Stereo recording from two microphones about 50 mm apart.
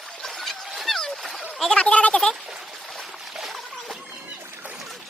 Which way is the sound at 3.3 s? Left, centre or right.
Centre.